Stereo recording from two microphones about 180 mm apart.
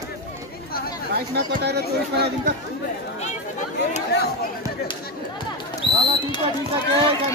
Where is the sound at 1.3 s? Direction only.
65° right (ahead or behind).